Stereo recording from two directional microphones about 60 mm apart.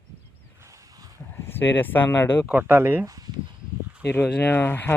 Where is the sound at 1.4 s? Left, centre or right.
Left.